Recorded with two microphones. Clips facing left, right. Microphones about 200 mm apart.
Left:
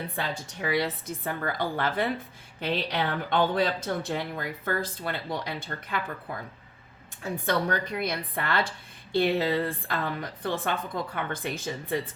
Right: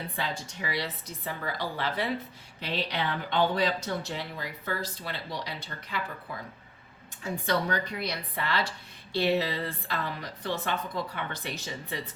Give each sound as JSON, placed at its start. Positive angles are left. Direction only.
{"t": 0.2, "sound": "speech", "side_deg": 50}